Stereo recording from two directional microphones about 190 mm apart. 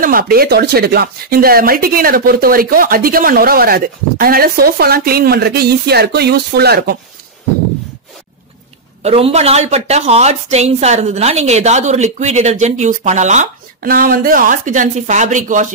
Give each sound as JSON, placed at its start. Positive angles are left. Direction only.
{"t": 0.0, "sound": "speech", "side_deg": -50}
{"t": 9.0, "sound": "a woman's voice", "side_deg": -30}